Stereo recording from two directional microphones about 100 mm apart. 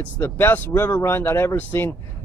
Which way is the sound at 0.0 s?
20° left (ahead or behind).